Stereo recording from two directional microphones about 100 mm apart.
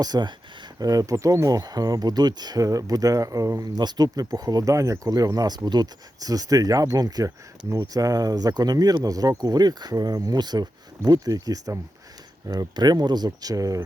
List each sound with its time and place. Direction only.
0.0 s speech: 45° right (ahead or behind)
3.8 s speech: 45° right (ahead or behind)